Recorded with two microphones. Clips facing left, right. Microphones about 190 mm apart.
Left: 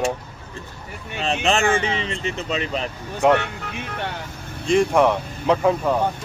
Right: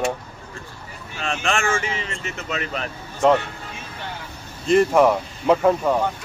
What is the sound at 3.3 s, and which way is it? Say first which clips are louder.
Vehicle: left 1 dB; 65° left (ahead or behind).